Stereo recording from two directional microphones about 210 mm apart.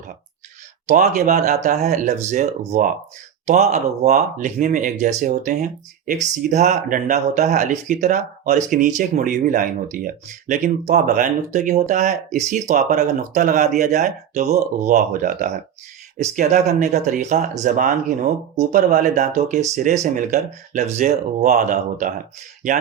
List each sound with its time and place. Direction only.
0.9 s speech: 35° right (ahead or behind)